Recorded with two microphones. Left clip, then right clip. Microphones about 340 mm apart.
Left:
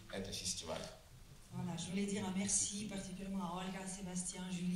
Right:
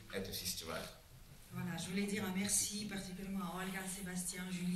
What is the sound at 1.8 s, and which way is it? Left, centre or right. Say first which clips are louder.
A woman's voice: right 2 dB; centre.